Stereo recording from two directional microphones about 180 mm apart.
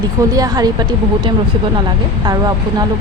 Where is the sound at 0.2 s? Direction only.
20° right (ahead or behind).